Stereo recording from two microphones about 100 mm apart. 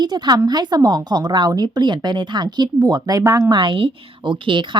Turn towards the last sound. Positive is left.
turn(degrees=-55)  # may be behind; listen again after turning